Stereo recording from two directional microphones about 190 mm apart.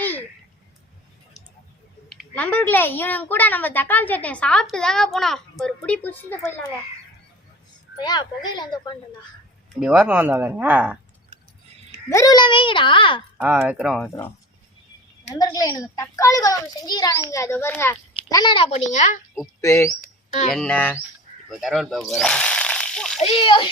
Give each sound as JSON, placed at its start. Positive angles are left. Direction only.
{"t": 0.0, "sound": "a sound", "side_deg": 10}
{"t": 2.0, "sound": "a child's voice", "side_deg": 5}
{"t": 7.9, "sound": "a child's voice", "side_deg": 20}
{"t": 9.8, "sound": "speech", "side_deg": -5}
{"t": 12.1, "sound": "a child's voice", "side_deg": 20}
{"t": 13.4, "sound": "speech", "side_deg": -5}
{"t": 15.3, "sound": "a child's voice", "side_deg": 20}
{"t": 18.9, "sound": "a woman's voice", "side_deg": 40}
{"t": 19.6, "sound": "a child's voice", "side_deg": 15}
{"t": 21.5, "sound": "speech", "side_deg": 0}
{"t": 23.2, "sound": "a child's voice", "side_deg": 30}